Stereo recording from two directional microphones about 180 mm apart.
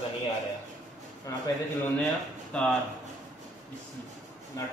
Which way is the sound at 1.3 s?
20° left (ahead or behind).